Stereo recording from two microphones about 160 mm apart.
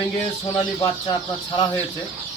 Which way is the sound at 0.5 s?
30° left (ahead or behind).